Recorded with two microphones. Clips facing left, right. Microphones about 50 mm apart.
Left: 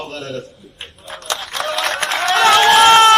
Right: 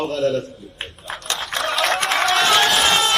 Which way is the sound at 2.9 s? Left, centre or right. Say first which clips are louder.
Left 10 dB; left.